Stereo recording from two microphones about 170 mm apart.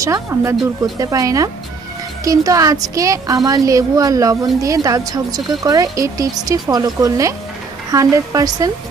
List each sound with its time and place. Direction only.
0.0 s a woman's voice: 15° right (ahead or behind)